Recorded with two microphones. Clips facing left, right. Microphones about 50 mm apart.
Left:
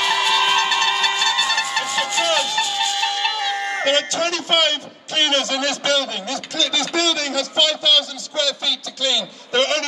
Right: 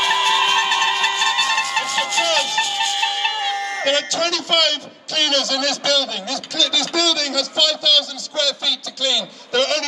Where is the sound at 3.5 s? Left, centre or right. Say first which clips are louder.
Left 2 dB; left.